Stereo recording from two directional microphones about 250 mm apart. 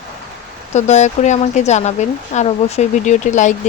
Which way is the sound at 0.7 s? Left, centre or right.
Left.